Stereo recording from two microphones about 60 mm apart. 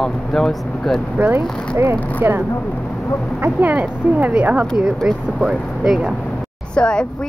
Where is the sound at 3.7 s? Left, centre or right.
Right.